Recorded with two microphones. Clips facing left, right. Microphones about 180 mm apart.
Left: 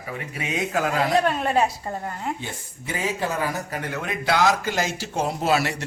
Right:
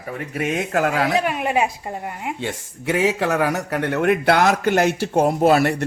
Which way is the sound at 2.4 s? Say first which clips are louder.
Right 9 dB; 80° right.